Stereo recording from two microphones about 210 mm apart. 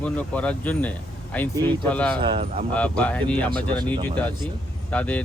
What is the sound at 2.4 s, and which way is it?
Speech, 30° right (ahead or behind).